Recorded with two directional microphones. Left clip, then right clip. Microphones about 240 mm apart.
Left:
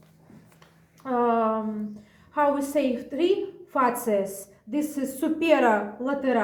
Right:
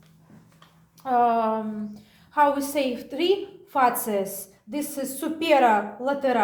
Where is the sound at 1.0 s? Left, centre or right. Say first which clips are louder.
Right 2 dB; right.